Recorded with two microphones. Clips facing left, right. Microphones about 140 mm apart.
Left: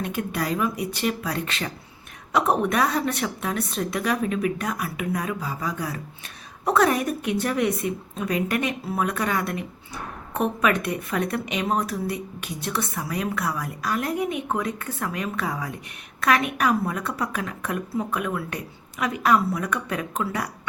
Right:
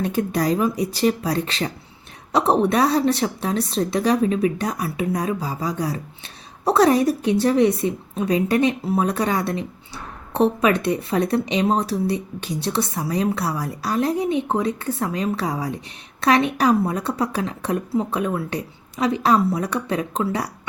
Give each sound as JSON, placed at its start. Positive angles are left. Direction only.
{"t": 0.0, "sound": "a woman's voice", "side_deg": -35}